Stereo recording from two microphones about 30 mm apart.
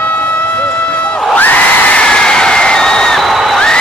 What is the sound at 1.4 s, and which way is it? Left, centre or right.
Crowd, left.